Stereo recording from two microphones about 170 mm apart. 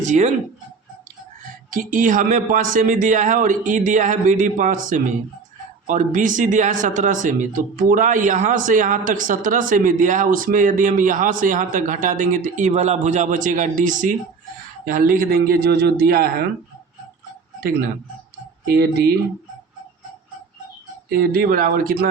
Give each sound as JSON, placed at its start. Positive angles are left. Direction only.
{"t": 0.0, "sound": "a man's voice", "side_deg": -45}
{"t": 1.7, "sound": "a man's voice", "side_deg": -50}
{"t": 17.6, "sound": "speech", "side_deg": -60}
{"t": 21.1, "sound": "a man's voice", "side_deg": -60}